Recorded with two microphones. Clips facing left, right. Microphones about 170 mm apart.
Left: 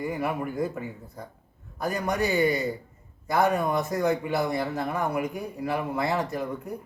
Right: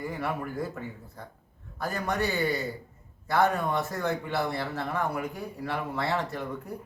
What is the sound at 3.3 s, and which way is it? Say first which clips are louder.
Speech: left 2 dB; 15° left (ahead or behind).